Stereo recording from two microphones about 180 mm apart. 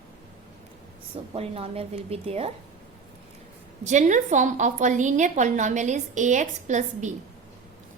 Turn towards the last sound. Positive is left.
turn(degrees=-40)  # may be behind; listen again after turning